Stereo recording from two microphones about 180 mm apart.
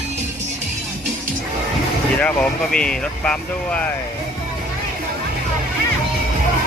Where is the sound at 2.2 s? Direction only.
5° left (ahead or behind).